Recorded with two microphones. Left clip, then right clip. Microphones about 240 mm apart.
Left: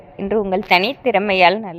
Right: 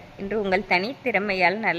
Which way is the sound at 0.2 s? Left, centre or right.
Centre.